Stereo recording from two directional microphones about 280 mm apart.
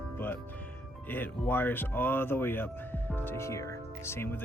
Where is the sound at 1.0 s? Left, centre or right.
Centre.